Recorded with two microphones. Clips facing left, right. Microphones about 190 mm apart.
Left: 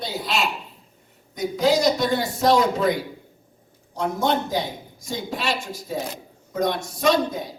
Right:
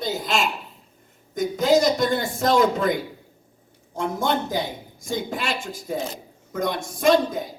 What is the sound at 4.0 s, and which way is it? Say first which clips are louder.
A man's voice: left 1 dB; 50° right (ahead or behind).